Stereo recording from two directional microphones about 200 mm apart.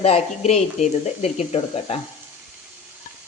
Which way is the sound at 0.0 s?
30° left (ahead or behind).